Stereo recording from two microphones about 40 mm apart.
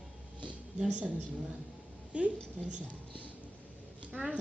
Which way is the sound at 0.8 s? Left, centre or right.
Right.